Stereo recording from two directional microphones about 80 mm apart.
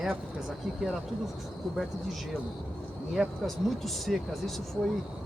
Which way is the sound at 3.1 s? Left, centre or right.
Centre.